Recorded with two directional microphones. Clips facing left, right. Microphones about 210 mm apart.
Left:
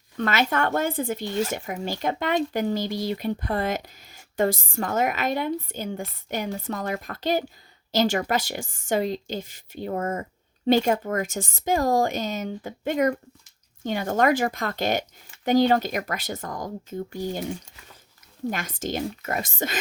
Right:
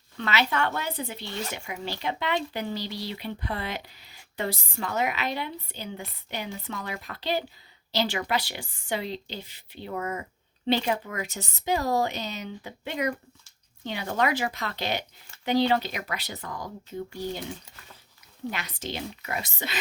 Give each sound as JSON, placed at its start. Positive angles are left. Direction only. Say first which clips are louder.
{"t": 0.2, "sound": "speech", "louder": "left 3 dB", "side_deg": 50}
{"t": 18.5, "sound": "speech", "louder": "left 7 dB", "side_deg": 50}